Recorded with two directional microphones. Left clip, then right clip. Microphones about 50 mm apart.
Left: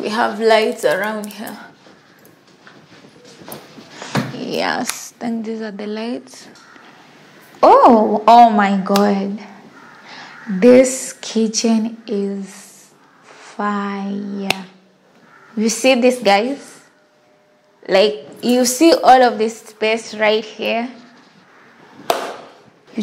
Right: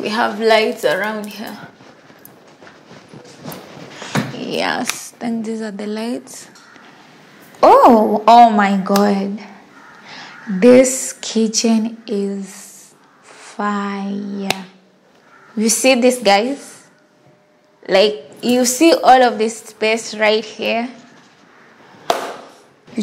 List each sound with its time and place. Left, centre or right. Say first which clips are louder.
0.0 s a woman's voice: even; centre
4.0 s a sound: even; centre
5.4 s a woman's voice: right 1 dB; right
7.6 s a woman's voice: even; centre
17.8 s a woman's voice: even; centre
18.4 s a woman's voice: even; left
19.3 s a woman's voice: even; centre
19.9 s a woman's voice: right 1 dB; centre
22.1 s chop: even; centre